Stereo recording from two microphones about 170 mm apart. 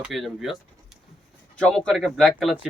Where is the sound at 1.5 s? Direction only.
5° left (ahead or behind).